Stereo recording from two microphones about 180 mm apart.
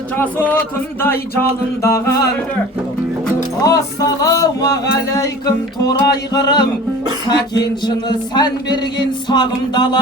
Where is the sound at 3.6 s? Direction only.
20° left (ahead or behind).